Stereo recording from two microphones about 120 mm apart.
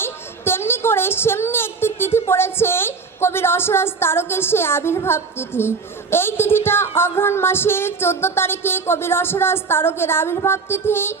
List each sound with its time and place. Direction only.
0.0 s a woman's voice: 20° left (ahead or behind)